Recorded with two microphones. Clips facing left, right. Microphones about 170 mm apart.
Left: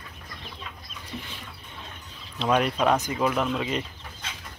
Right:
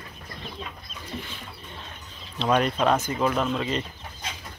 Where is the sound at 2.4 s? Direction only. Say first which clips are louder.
Right 1 dB; 10° left (ahead or behind).